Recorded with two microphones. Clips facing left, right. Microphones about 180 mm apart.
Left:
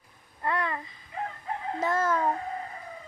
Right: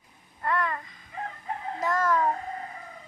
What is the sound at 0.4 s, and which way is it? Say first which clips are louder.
Babbling: right 1 dB; 25° left (ahead or behind).